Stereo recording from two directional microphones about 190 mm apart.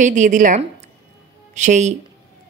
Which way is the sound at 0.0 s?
40° right (ahead or behind).